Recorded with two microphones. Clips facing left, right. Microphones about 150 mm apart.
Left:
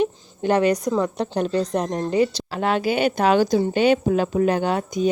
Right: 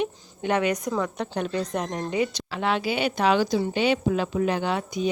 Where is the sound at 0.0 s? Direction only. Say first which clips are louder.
Left 6 dB; 35° left (ahead or behind).